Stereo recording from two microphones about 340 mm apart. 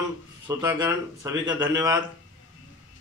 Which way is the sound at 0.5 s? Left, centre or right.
Centre.